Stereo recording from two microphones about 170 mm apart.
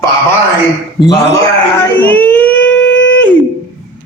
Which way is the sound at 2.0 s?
10° left (ahead or behind).